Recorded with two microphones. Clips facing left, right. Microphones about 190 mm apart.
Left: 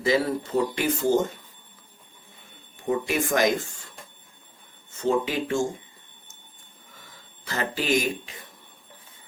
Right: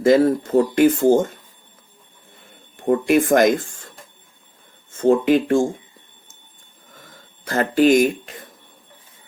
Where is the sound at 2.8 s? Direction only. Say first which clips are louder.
Right 9 dB; 55° right (ahead or behind).